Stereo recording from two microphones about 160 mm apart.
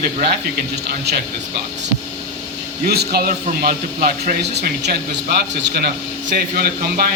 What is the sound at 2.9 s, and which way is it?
Speech, 75° right (ahead or behind).